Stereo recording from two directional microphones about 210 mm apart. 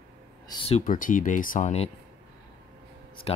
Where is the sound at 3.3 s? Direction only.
25° left (ahead or behind).